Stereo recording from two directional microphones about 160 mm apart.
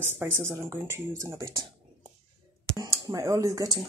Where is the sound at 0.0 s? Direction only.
15° right (ahead or behind).